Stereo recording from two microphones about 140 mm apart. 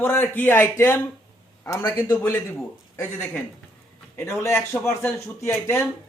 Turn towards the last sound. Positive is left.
turn(degrees=15)  # may be behind; listen again after turning